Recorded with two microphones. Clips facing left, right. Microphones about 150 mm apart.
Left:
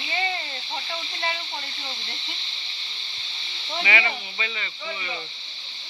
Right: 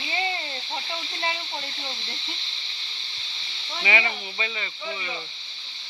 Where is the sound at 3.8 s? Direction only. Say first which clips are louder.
Right 1 dB; 25° right (ahead or behind).